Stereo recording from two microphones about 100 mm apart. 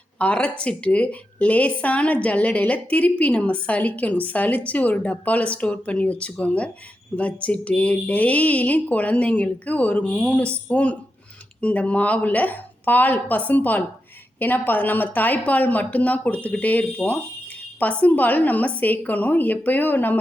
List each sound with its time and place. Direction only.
0.2 s a woman's voice: 15° left (ahead or behind)